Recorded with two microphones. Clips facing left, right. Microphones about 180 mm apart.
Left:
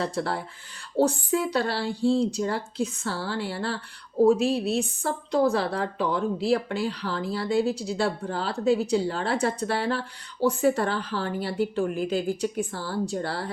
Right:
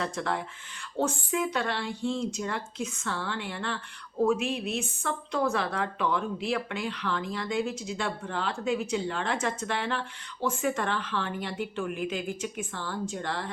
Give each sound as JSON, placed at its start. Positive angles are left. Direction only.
{"t": 0.0, "sound": "a woman's voice", "side_deg": 35}